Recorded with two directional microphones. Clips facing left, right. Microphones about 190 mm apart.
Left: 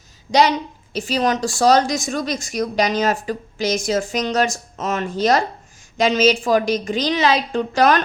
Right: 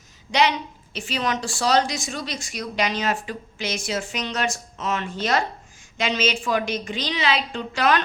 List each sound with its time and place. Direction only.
0.3 s a woman's voice: 40° left (ahead or behind)